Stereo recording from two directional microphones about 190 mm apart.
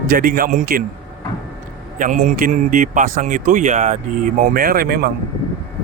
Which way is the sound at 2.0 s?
40° right (ahead or behind).